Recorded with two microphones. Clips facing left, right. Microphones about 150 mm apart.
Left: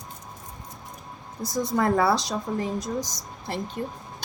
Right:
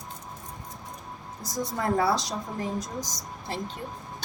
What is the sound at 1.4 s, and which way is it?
A woman's voice, 70° left (ahead or behind).